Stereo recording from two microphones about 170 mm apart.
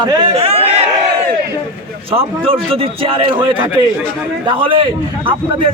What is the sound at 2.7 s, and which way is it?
Speech, 35° right (ahead or behind).